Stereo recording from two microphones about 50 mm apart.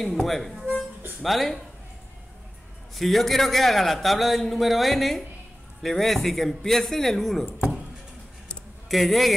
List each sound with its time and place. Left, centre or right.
0.0 s a man's voice: centre
2.9 s a man's voice: centre
8.8 s speech: centre